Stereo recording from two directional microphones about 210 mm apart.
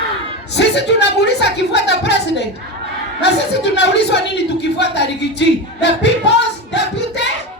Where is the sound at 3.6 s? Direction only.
55° left (ahead or behind).